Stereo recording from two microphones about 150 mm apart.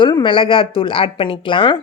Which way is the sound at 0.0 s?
30° left (ahead or behind).